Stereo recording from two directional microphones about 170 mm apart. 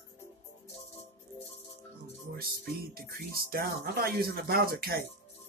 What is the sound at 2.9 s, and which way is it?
Speech, 60° right (ahead or behind).